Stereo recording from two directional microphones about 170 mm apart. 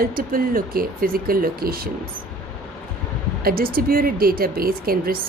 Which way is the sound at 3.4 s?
60° right (ahead or behind).